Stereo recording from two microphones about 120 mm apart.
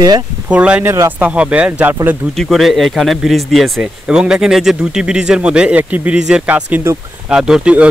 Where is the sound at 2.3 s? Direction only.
Centre (ahead or behind); by 7.0 s 15° right (ahead or behind).